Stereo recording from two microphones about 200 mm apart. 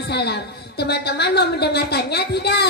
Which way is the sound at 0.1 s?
55° left (ahead or behind).